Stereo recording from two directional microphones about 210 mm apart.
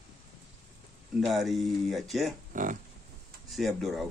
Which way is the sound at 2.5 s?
40° right (ahead or behind).